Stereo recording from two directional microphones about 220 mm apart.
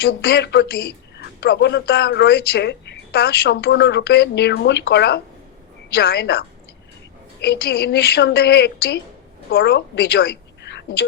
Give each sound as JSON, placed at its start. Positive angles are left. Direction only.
{"t": 0.0, "sound": "speech", "side_deg": 45}
{"t": 7.4, "sound": "a woman's voice", "side_deg": 45}